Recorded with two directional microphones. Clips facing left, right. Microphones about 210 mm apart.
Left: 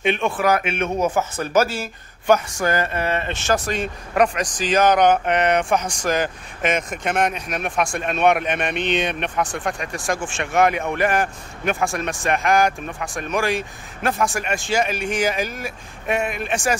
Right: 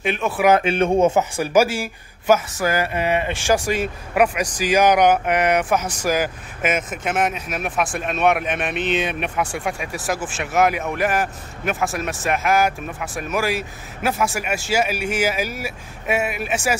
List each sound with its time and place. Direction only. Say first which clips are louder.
0.0 s speech: even; 5° right (ahead or behind)
0.5 s speech: right 7 dB; 30° right (ahead or behind)
1.3 s speech: right 2 dB; 10° right (ahead or behind)